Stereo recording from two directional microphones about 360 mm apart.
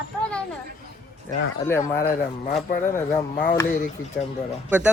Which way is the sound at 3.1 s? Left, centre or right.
Left.